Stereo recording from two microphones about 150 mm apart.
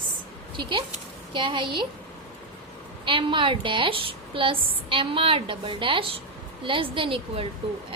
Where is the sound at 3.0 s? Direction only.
35° right (ahead or behind).